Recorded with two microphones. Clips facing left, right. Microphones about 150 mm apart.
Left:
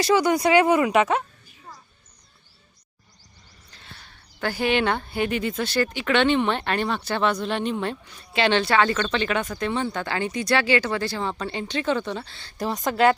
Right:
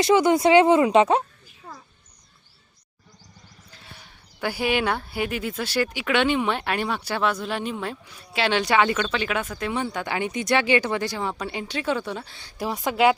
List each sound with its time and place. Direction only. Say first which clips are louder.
0.0 s speech: right 2 dB; 20° right (ahead or behind)
3.7 s speech: left 1 dB; 5° right (ahead or behind)
8.6 s speech: even; 15° right (ahead or behind)